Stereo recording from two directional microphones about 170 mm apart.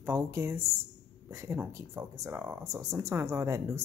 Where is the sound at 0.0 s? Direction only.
15° right (ahead or behind).